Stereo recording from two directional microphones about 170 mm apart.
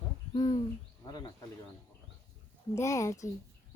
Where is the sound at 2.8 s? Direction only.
20° left (ahead or behind).